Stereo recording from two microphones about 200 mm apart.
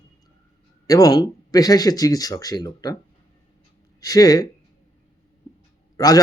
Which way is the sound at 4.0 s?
20° left (ahead or behind).